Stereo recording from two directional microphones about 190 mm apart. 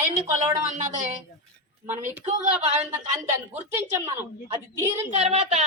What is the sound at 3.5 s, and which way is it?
A woman's voice, 15° right (ahead or behind).